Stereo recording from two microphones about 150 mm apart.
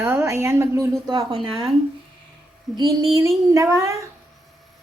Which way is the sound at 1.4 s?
40° right (ahead or behind).